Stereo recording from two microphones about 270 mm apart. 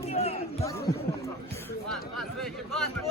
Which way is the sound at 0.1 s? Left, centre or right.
Left.